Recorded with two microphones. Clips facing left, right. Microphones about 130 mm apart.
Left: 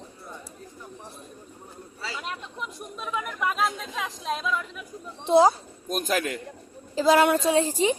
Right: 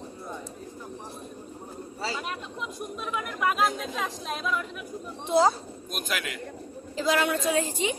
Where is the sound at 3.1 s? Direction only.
5° right (ahead or behind).